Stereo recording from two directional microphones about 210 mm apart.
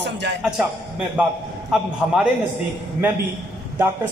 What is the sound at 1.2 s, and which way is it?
Speech, 5° right (ahead or behind).